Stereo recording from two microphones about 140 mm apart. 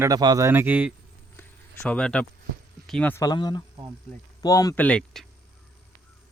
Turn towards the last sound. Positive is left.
turn(degrees=5)  # may be behind; listen again after turning